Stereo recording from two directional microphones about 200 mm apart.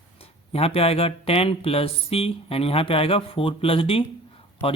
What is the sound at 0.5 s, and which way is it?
Speech, 30° left (ahead or behind).